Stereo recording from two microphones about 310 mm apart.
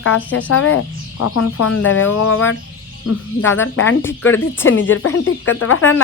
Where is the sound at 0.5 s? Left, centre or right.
Left.